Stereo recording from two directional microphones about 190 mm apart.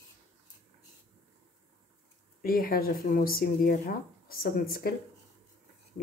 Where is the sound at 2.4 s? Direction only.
50° left (ahead or behind).